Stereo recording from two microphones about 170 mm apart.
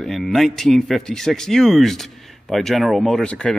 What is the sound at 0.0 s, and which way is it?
A man's voice, centre (ahead or behind).